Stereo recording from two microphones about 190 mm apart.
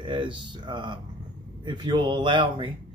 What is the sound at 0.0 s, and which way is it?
A man's voice, 25° right (ahead or behind).